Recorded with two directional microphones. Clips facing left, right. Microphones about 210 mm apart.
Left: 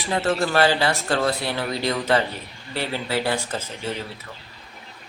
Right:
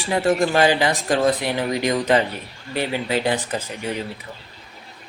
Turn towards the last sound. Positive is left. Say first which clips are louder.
# right 3 dB
turn(degrees=-15)  # may be behind; listen again after turning